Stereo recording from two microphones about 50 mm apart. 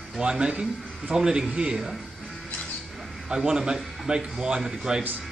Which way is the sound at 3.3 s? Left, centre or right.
Centre.